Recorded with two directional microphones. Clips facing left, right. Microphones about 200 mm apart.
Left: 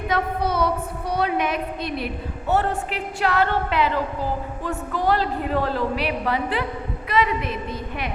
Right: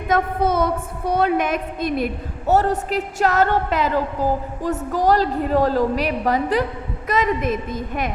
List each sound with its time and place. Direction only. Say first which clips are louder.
0.1 s a woman's voice: right 5 dB; 50° right (ahead or behind)